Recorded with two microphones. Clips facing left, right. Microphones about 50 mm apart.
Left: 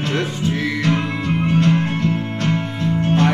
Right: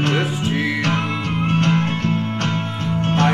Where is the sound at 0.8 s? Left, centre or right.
Right.